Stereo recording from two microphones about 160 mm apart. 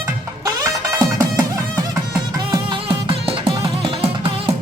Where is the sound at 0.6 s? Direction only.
15° right (ahead or behind).